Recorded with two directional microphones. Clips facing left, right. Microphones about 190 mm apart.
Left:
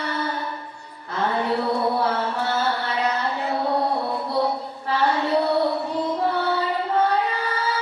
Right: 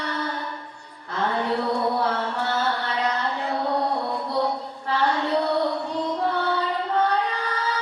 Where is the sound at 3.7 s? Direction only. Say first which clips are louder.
Left 2 dB; 30° left (ahead or behind).